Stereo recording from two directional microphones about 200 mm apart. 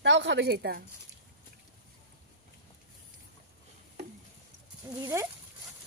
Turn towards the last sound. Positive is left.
turn(degrees=-20)  # may be behind; listen again after turning